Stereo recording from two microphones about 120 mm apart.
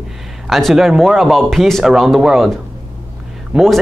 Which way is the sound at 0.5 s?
Centre (ahead or behind).